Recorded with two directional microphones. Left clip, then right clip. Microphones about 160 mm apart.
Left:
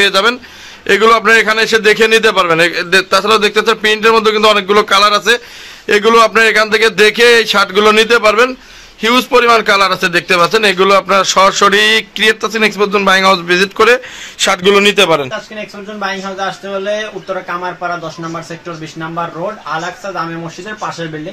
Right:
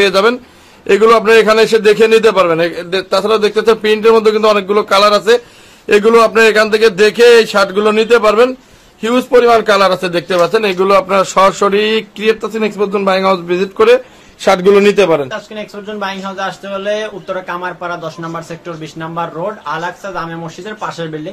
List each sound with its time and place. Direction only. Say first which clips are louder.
0.0 s a man's voice: even; 5° right (ahead or behind)
14.4 s a man's voice: right 1 dB; 10° right (ahead or behind)
16.0 s speech: left 2 dB; 30° right (ahead or behind)
18.9 s speech: even; 30° right (ahead or behind)